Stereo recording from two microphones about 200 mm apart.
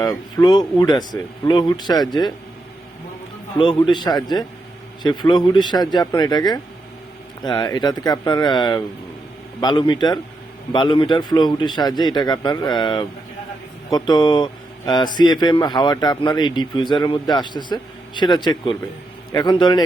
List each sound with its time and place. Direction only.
0.0 s speech: 20° left (ahead or behind)
3.6 s speech: 25° left (ahead or behind)